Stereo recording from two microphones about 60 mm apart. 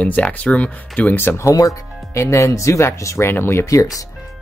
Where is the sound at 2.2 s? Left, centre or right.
Left.